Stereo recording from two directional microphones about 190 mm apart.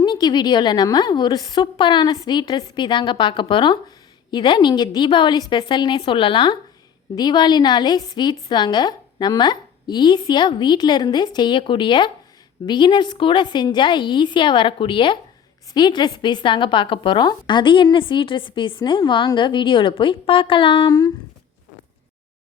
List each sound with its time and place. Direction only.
0.0 s a woman's voice: 20° left (ahead or behind)